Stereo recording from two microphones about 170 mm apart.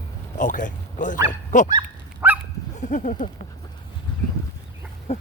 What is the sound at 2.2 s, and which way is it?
Dog, 10° right (ahead or behind).